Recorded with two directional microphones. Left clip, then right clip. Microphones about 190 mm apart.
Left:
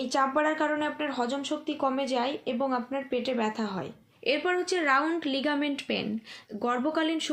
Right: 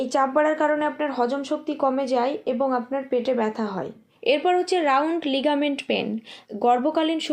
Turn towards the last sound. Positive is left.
turn(degrees=15)  # may be behind; listen again after turning